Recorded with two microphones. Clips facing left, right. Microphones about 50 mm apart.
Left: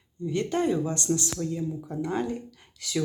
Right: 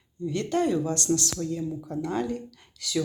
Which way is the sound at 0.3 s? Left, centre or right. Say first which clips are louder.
Even; left.